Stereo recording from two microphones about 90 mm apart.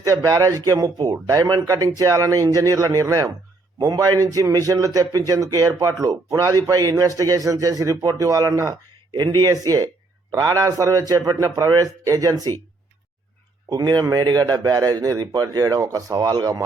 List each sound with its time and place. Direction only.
0.0 s a man's voice: 40° right (ahead or behind)
13.7 s speech: 45° right (ahead or behind)